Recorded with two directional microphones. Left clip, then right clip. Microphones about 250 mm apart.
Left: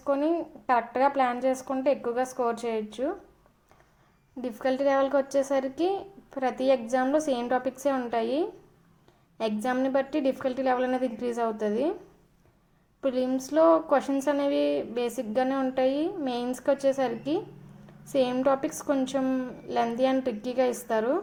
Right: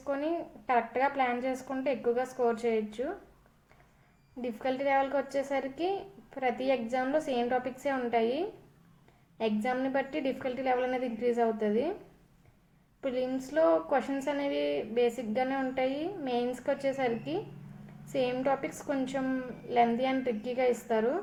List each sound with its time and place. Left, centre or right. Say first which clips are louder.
0.0 s a woman's voice: left 6 dB; left
4.8 s a woman's voice: left 4 dB; left
9.4 s a woman's voice: left 3 dB; left
13.0 s a woman's voice: left 5 dB; left